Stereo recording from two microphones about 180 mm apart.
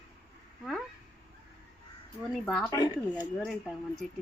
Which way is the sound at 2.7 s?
20° left (ahead or behind).